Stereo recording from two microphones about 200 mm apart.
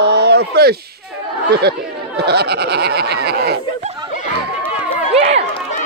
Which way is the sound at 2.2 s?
55° right (ahead or behind).